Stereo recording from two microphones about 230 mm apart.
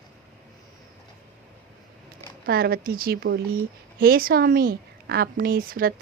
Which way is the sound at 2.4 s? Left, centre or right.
Right.